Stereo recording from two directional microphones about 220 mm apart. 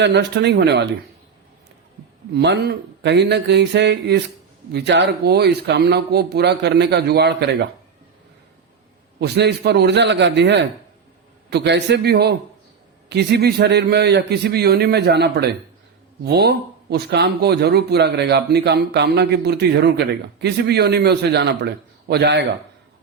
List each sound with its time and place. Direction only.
0.0 s speech: 50° right (ahead or behind)
2.3 s speech: 50° right (ahead or behind)
9.2 s speech: 50° right (ahead or behind)